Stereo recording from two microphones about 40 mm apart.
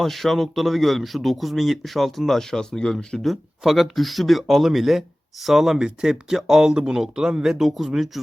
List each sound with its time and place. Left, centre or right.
0.0 s speech: centre
2.6 s speech: centre
3.6 s speech: centre
5.8 s speech: centre
6.3 s speech: centre
6.7 s speech: right
7.6 s speech: centre